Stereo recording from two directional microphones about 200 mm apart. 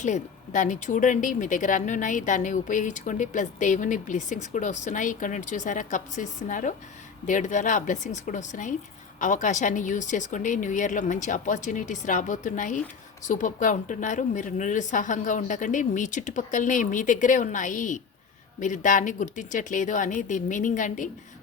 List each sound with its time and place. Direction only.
0.0 s speech: 40° left (ahead or behind)